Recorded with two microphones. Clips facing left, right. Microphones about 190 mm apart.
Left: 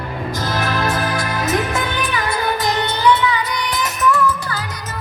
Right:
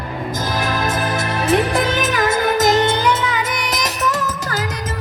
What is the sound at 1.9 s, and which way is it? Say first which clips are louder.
Music: right 4 dB; 45° right (ahead or behind).